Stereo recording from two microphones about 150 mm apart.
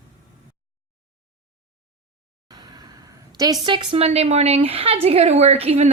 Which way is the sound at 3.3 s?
25° right (ahead or behind).